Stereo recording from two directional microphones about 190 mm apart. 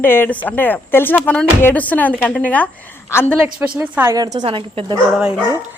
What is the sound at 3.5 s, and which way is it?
A woman's voice, 10° right (ahead or behind).